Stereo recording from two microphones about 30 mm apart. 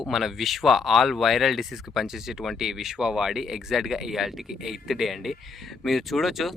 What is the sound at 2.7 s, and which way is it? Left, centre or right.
Speech, centre.